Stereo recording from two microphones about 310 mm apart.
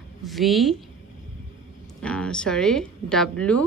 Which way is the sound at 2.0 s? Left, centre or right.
Centre.